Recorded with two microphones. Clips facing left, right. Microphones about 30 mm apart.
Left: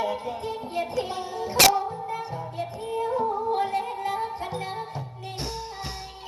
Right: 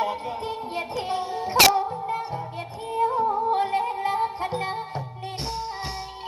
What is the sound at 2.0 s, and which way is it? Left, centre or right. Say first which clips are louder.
Music: right 3 dB; right.